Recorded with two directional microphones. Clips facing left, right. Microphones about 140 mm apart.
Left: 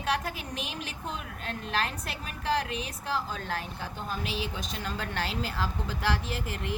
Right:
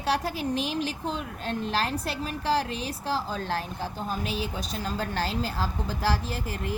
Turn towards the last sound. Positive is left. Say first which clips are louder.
# right 2 dB
turn(degrees=-40)  # may be behind; listen again after turning